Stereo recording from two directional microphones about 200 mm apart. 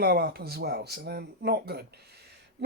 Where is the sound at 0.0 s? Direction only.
50° right (ahead or behind).